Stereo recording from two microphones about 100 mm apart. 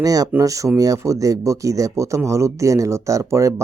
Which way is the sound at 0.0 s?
35° right (ahead or behind).